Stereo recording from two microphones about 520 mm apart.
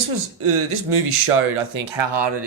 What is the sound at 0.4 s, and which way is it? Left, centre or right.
Speech, right.